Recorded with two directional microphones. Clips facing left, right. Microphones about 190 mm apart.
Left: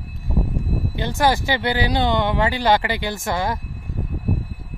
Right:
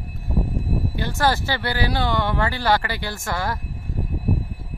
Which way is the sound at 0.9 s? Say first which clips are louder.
Left 3 dB; 20° left (ahead or behind).